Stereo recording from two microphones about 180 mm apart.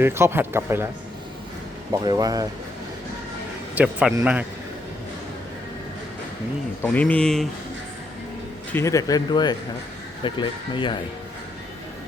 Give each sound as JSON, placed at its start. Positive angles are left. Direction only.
{"t": 0.0, "sound": "speech", "side_deg": -15}
{"t": 1.9, "sound": "speech", "side_deg": -20}
{"t": 3.8, "sound": "speech", "side_deg": -10}
{"t": 6.8, "sound": "speech", "side_deg": 10}
{"t": 8.7, "sound": "speech", "side_deg": 15}